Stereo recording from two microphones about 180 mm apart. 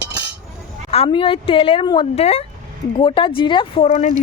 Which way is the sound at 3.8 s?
40° left (ahead or behind).